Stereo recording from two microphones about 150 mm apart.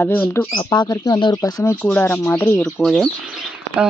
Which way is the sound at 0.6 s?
25° left (ahead or behind).